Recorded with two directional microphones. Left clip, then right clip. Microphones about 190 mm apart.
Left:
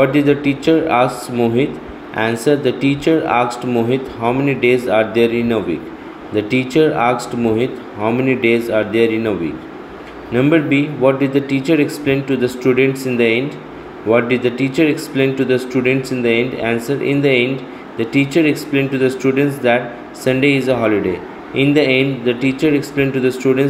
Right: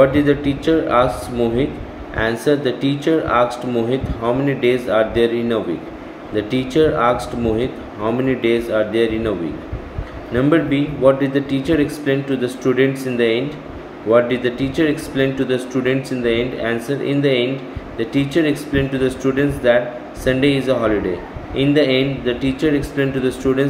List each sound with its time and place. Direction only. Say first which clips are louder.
0.0 s speech: even; 15° left (ahead or behind)
10.3 s speech: left 2 dB; 15° left (ahead or behind)